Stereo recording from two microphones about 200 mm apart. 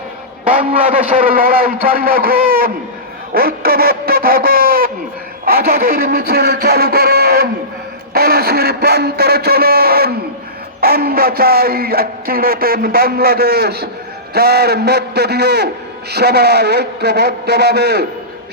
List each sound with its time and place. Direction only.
1.2 s a man's voice: 45° right (ahead or behind)